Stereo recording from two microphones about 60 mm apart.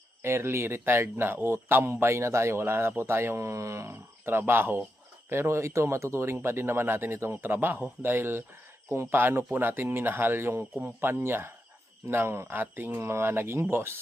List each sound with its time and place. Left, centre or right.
0.2 s speech: right